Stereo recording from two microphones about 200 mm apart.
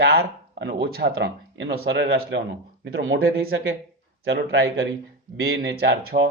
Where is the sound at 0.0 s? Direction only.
55° right (ahead or behind).